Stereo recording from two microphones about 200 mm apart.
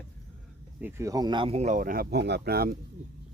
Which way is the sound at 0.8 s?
15° right (ahead or behind).